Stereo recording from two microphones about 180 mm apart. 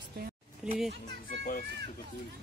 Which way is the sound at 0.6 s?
5° right (ahead or behind).